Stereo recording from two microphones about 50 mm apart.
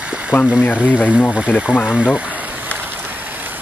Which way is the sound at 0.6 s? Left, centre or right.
Left.